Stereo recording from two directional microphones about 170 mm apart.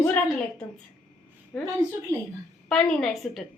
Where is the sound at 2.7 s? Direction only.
Centre (ahead or behind).